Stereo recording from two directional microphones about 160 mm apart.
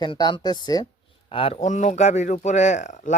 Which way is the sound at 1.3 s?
35° left (ahead or behind).